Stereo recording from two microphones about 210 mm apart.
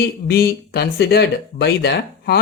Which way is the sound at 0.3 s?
50° left (ahead or behind).